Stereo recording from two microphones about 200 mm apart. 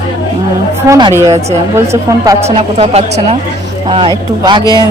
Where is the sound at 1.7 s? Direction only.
15° right (ahead or behind).